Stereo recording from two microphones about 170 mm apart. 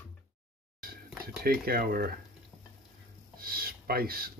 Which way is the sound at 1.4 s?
60° right (ahead or behind).